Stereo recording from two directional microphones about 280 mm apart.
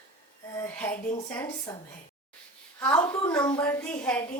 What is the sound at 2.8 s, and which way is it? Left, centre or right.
A woman's voice, centre.